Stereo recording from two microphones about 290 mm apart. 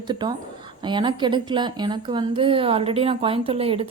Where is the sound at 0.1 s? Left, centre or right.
Centre.